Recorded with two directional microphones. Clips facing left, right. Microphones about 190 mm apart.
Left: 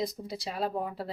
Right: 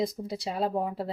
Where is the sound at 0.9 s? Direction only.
15° right (ahead or behind).